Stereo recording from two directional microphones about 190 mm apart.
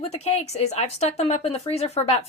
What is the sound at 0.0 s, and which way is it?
Speech, 35° left (ahead or behind).